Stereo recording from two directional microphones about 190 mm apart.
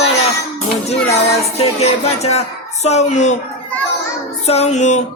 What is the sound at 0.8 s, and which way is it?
Speech, 35° left (ahead or behind).